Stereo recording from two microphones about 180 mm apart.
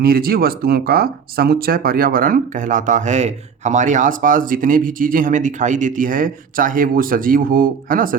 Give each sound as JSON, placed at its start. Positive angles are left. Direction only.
{"t": 0.0, "sound": "speech", "side_deg": -55}